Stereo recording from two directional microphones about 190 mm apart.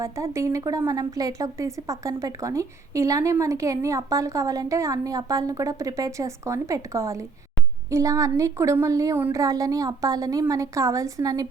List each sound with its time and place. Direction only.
0.0 s a woman's voice: 15° right (ahead or behind)